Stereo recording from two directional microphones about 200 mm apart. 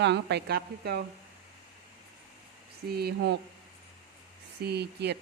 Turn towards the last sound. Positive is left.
turn(degrees=-55)  # may be behind; listen again after turning